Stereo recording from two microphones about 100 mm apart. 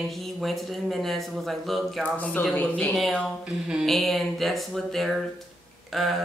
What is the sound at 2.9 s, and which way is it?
Speech, centre (ahead or behind).